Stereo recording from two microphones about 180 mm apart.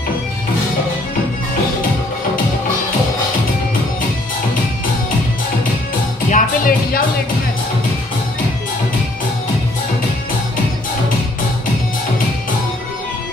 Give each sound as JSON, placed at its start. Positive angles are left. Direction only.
{"t": 6.3, "sound": "music", "side_deg": 50}